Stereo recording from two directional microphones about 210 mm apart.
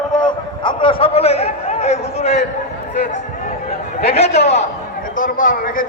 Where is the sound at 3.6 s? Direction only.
30° left (ahead or behind).